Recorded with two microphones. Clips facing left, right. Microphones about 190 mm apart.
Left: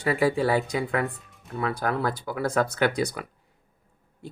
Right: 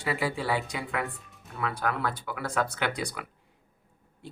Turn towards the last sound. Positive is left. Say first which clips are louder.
# left 7 dB
turn(degrees=40)  # may be behind; listen again after turning